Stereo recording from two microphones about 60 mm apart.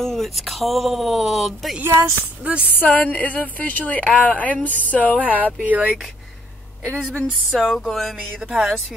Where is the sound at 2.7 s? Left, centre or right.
Left.